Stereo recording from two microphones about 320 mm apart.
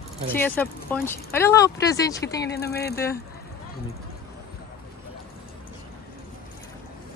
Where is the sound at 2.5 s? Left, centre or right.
Left.